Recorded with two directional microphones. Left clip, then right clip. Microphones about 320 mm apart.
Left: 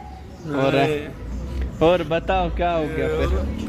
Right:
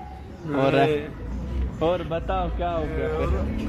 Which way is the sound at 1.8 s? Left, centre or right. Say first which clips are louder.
Left 6 dB; left.